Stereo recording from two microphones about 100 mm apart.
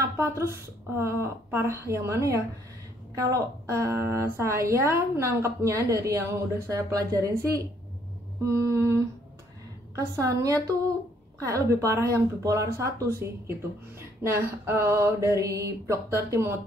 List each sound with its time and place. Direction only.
0.2 s speech: 25° right (ahead or behind)